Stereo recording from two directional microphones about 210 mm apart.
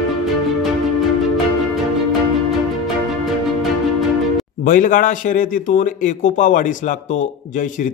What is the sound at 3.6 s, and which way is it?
Music, centre (ahead or behind).